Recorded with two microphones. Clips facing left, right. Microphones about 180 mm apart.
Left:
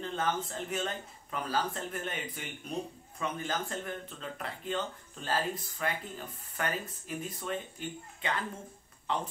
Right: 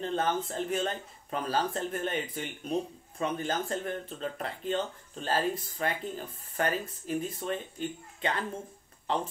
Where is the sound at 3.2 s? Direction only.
35° right (ahead or behind).